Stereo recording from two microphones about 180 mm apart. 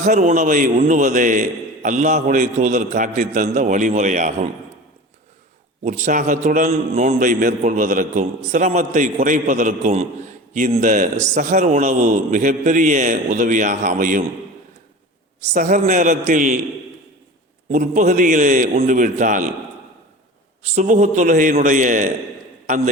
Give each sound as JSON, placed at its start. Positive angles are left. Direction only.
{"t": 0.0, "sound": "a man's voice", "side_deg": -45}
{"t": 5.8, "sound": "a man's voice", "side_deg": -40}
{"t": 15.5, "sound": "a man's voice", "side_deg": -45}
{"t": 17.7, "sound": "a man's voice", "side_deg": -45}
{"t": 20.7, "sound": "a man's voice", "side_deg": -45}